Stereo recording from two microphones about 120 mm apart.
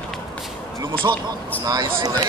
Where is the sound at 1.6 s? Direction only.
30° right (ahead or behind).